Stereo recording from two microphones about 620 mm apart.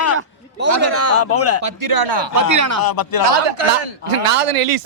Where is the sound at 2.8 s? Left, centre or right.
Left.